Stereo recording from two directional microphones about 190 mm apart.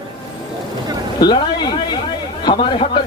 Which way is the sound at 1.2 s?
20° left (ahead or behind).